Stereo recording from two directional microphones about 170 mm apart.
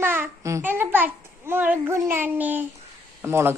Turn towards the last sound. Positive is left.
turn(degrees=-15)  # may be behind; listen again after turning